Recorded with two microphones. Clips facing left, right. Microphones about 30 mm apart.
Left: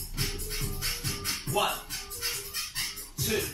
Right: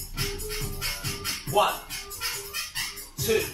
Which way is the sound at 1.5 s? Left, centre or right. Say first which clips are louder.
Right 7 dB; right.